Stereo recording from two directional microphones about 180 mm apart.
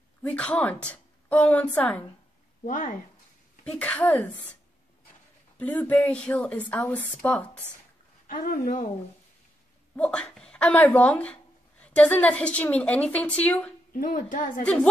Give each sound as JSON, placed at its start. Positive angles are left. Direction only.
{"t": 0.2, "sound": "a woman's voice", "side_deg": 5}
{"t": 2.6, "sound": "speech", "side_deg": 45}
{"t": 3.6, "sound": "a woman's voice", "side_deg": 5}
{"t": 5.6, "sound": "a woman's voice", "side_deg": 10}
{"t": 8.3, "sound": "speech", "side_deg": 50}
{"t": 9.9, "sound": "a woman's voice", "side_deg": 5}
{"t": 13.9, "sound": "speech", "side_deg": 50}
{"t": 14.6, "sound": "a woman's voice", "side_deg": 5}